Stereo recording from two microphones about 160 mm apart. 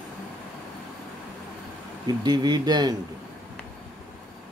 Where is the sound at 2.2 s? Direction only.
25° right (ahead or behind).